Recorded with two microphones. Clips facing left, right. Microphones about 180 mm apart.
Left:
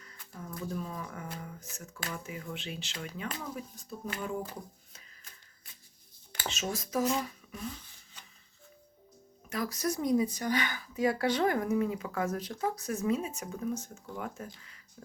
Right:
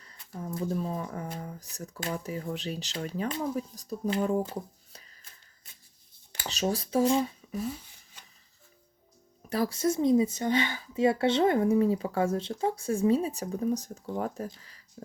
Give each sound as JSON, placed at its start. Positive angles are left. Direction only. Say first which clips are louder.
{"t": 0.0, "sound": "a sound", "louder": "right 6 dB", "side_deg": -30}
{"t": 2.0, "sound": "speech", "louder": "right 6 dB", "side_deg": -30}
{"t": 3.1, "sound": "speech", "louder": "right 9 dB", "side_deg": -25}
{"t": 4.4, "sound": "a sound", "louder": "right 6 dB", "side_deg": -35}
{"t": 6.5, "sound": "speech", "louder": "right 6 dB", "side_deg": -35}
{"t": 9.5, "sound": "speech", "louder": "right 6 dB", "side_deg": -30}
{"t": 15.0, "sound": "music", "louder": "right 6 dB", "side_deg": -30}